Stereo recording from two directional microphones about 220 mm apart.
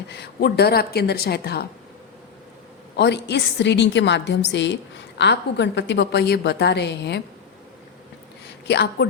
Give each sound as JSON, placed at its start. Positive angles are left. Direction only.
{"t": 0.1, "sound": "a woman's voice", "side_deg": 45}
{"t": 2.9, "sound": "a woman's voice", "side_deg": 50}
{"t": 8.4, "sound": "speech", "side_deg": 50}